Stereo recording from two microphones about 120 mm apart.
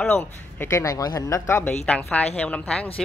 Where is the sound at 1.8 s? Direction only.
10° left (ahead or behind).